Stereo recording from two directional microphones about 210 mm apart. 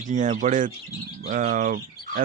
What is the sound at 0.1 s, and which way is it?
Speech, 35° right (ahead or behind).